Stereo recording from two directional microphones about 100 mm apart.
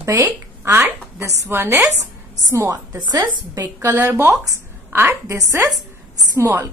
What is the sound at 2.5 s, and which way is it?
Speech, 35° right (ahead or behind).